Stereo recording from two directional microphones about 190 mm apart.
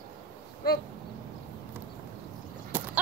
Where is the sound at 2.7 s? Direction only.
10° right (ahead or behind).